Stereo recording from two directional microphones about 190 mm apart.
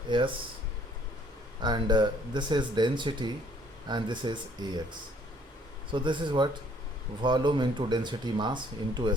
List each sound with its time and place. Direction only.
0.1 s speech: 25° right (ahead or behind)
1.6 s speech: 25° right (ahead or behind)
5.9 s speech: 25° right (ahead or behind)